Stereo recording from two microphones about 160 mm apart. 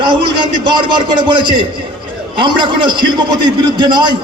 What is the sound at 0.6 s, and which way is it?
A man's voice, 30° right (ahead or behind).